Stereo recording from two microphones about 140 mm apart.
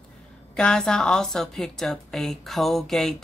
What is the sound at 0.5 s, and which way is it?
A woman's voice, 5° left (ahead or behind).